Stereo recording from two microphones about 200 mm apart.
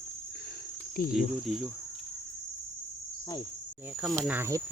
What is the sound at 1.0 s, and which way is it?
Cricket, 45° left (ahead or behind).